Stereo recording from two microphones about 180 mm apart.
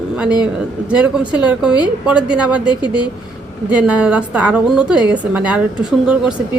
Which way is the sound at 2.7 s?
25° left (ahead or behind).